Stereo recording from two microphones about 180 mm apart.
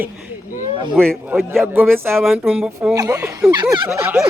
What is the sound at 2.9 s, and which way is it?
Speech, 20° right (ahead or behind).